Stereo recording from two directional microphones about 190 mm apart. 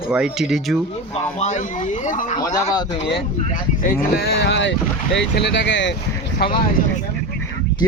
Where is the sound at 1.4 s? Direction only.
40° left (ahead or behind).